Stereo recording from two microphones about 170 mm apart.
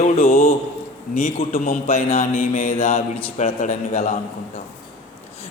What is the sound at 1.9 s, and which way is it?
Speech, 35° left (ahead or behind).